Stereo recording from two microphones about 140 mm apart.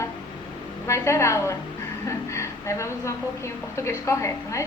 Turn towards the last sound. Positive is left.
turn(degrees=20)  # may be behind; listen again after turning